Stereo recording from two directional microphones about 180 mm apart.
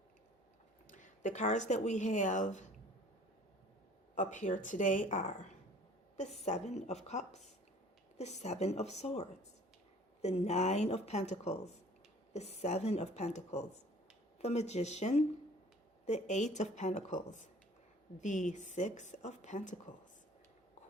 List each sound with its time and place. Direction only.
0.9 s speech: 45° left (ahead or behind)
4.1 s a woman's voice: 45° left (ahead or behind)
6.4 s a woman's voice: 40° left (ahead or behind)